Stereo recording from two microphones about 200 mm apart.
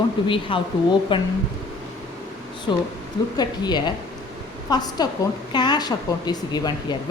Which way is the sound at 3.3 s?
20° left (ahead or behind).